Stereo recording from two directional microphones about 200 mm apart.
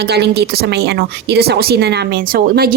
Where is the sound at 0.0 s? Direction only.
55° right (ahead or behind).